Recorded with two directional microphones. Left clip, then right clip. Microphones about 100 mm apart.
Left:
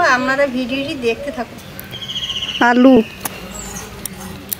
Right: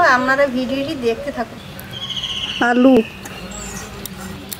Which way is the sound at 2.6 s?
30° left (ahead or behind).